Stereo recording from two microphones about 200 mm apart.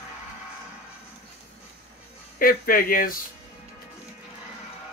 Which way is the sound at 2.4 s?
45° left (ahead or behind).